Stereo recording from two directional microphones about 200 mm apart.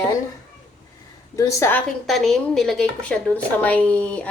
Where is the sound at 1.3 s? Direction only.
15° left (ahead or behind).